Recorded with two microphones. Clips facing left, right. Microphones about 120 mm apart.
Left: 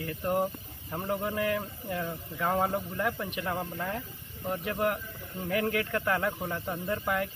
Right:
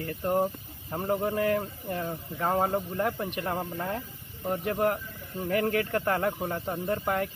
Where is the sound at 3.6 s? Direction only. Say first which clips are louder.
Right 2 dB; 15° right (ahead or behind).